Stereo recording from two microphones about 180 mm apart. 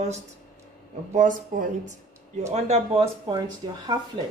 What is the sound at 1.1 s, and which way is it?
A woman's voice, 45° right (ahead or behind).